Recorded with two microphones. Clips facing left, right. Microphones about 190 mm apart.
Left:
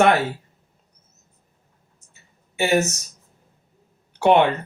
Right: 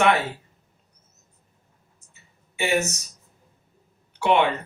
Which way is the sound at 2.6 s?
40° left (ahead or behind).